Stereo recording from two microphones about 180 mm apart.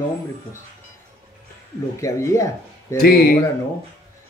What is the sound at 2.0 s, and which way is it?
Speech, 15° left (ahead or behind).